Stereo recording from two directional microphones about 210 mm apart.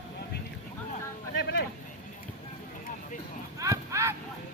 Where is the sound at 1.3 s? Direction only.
55° left (ahead or behind).